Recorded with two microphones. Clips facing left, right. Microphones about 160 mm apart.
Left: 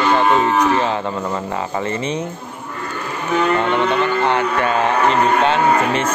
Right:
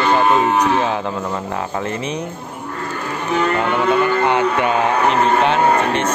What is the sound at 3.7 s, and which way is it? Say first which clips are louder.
Moo: right 1 dB; 15° right (ahead or behind).